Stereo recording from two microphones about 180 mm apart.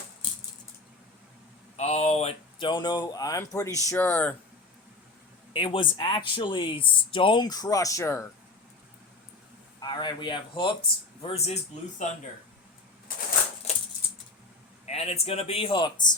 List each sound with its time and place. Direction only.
1.7 s speech: 35° left (ahead or behind); by 4.4 s 10° left (ahead or behind)
5.5 s speech: 25° left (ahead or behind)
9.8 s speech: 25° left (ahead or behind)
13.7 s a sound: 35° left (ahead or behind)
14.8 s speech: 35° left (ahead or behind)